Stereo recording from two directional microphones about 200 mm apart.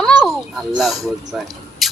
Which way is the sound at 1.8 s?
Centre (ahead or behind).